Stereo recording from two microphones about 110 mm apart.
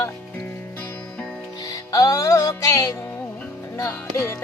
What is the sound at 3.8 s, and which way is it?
Speech, 25° left (ahead or behind).